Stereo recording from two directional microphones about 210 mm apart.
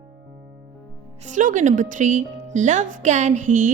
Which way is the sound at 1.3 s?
35° right (ahead or behind).